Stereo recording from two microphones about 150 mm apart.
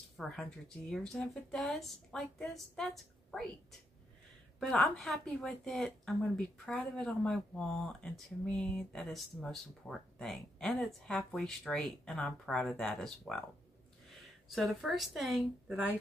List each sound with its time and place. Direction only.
0.2 s speech: 5° left (ahead or behind)
4.6 s speech: 5° left (ahead or behind)
14.5 s speech: centre (ahead or behind)